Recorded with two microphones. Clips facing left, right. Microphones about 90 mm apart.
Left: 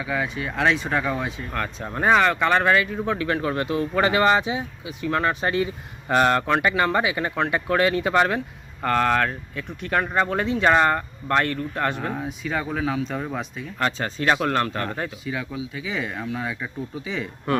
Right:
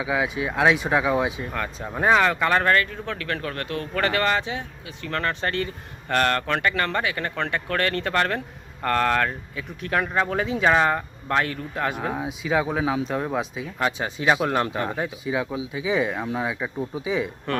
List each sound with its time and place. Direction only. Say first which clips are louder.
0.0 s speech: right 2 dB; 10° right (ahead or behind)
17.5 s speech: left 5 dB; 10° left (ahead or behind)